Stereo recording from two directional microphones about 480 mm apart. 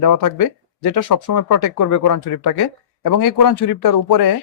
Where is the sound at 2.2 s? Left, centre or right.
Left.